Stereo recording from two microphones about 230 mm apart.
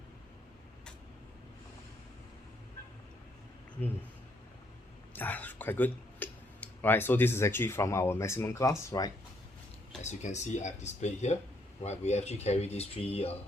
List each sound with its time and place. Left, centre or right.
5.1 s speech: centre
10.0 s speech: left